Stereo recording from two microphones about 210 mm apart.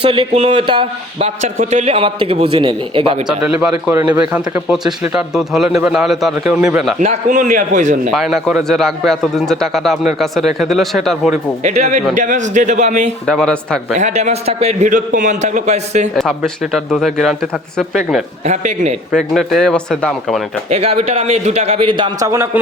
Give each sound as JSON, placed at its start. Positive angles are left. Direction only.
{"t": 0.0, "sound": "a man's voice", "side_deg": -25}
{"t": 3.2, "sound": "speech", "side_deg": -5}
{"t": 7.0, "sound": "a man's voice", "side_deg": -35}
{"t": 8.1, "sound": "speech", "side_deg": 0}
{"t": 11.6, "sound": "a man's voice", "side_deg": -35}
{"t": 13.2, "sound": "speech", "side_deg": 5}
{"t": 13.9, "sound": "a man's voice", "side_deg": -35}
{"t": 16.1, "sound": "speech", "side_deg": 0}
{"t": 18.4, "sound": "a man's voice", "side_deg": -35}
{"t": 19.1, "sound": "speech", "side_deg": 0}
{"t": 20.7, "sound": "a man's voice", "side_deg": -30}